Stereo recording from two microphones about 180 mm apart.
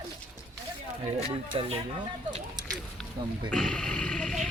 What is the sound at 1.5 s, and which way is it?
Speech, 30° right (ahead or behind).